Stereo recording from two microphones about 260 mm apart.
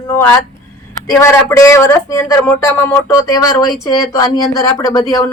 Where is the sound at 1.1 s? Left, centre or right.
Centre.